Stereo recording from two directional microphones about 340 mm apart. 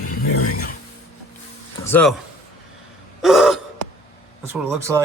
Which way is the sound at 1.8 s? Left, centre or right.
Centre.